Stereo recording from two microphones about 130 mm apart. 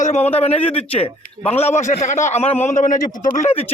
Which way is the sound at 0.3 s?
50° left (ahead or behind).